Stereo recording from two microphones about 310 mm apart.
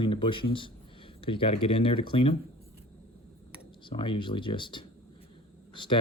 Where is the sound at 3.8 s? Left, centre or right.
Centre.